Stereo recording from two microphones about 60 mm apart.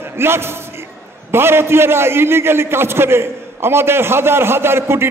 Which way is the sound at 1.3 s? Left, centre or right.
Right.